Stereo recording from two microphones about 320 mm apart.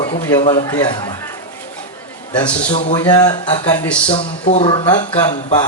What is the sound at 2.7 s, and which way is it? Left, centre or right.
Speech, left.